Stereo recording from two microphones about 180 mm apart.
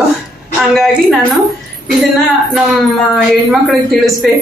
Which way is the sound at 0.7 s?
Centre (ahead or behind).